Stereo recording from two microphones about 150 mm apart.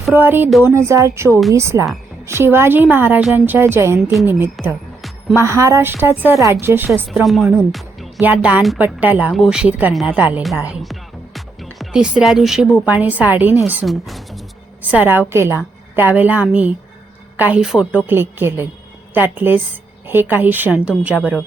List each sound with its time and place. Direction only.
0.1 s a woman's voice: 15° right (ahead or behind)
7.1 s a woman's voice: centre (ahead or behind)
11.3 s music: centre (ahead or behind)
12.8 s a woman's voice: 10° right (ahead or behind)
13.8 s a woman's voice: centre (ahead or behind)
14.8 s a woman's voice: 10° right (ahead or behind)